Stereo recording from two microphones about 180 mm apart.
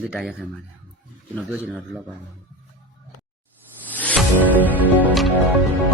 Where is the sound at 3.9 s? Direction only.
10° left (ahead or behind).